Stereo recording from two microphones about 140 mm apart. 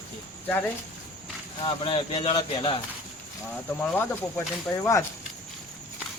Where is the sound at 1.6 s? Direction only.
40° left (ahead or behind).